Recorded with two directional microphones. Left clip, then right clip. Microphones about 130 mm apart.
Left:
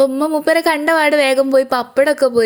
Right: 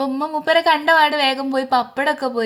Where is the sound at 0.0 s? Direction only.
30° left (ahead or behind).